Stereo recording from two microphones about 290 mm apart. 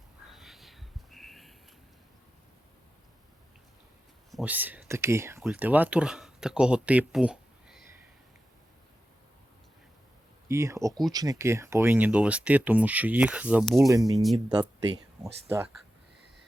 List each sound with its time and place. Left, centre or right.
0.3 s a sound: centre
4.3 s speech: centre
10.5 s speech: centre
13.9 s speech: centre